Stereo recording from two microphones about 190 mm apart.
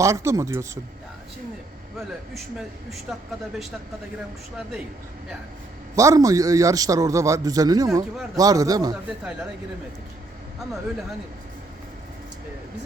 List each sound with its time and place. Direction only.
0.0 s a man's voice: 15° right (ahead or behind)
2.0 s speech: centre (ahead or behind)
6.0 s a man's voice: 15° right (ahead or behind)
9.0 s speech: 5° right (ahead or behind)